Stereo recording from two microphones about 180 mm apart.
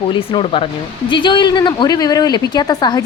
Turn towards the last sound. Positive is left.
turn(degrees=20)  # may be behind; listen again after turning